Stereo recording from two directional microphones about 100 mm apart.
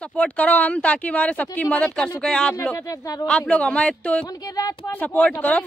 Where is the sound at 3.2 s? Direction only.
10° left (ahead or behind).